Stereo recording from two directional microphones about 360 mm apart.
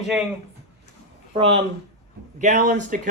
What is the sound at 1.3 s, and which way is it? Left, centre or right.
Speech, centre.